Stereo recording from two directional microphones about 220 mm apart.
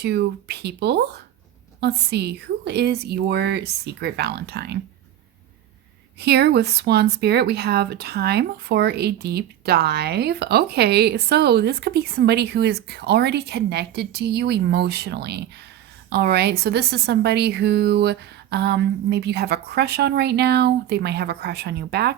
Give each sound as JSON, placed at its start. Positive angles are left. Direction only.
{"t": 0.0, "sound": "speech", "side_deg": -50}
{"t": 6.1, "sound": "speech", "side_deg": -50}